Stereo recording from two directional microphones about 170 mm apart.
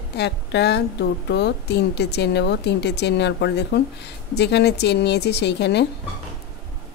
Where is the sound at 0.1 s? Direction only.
80° left.